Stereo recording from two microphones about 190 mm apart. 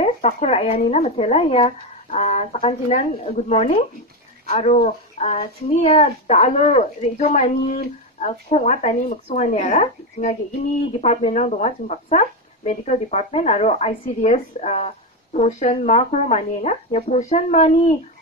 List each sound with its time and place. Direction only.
0.0 s speech: 35° left (ahead or behind)